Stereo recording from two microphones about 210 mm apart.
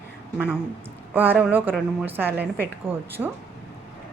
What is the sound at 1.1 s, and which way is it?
A woman's voice, 10° right (ahead or behind).